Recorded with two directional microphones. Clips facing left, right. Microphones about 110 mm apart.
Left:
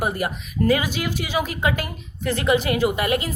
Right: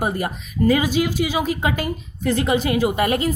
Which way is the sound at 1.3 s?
20° right (ahead or behind).